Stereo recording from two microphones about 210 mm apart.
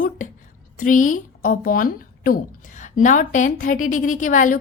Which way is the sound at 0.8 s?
40° left (ahead or behind).